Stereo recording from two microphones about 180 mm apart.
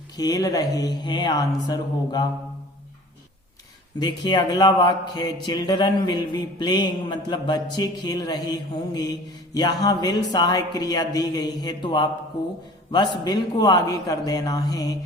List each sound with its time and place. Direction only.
0.2 s a man's voice: 20° left (ahead or behind)
4.0 s a man's voice: 25° left (ahead or behind)